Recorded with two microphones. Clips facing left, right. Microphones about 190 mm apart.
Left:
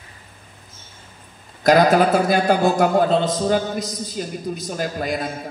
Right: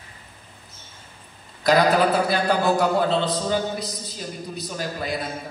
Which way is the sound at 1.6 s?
45° left (ahead or behind).